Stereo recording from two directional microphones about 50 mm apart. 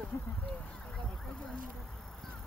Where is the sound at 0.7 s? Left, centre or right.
Centre.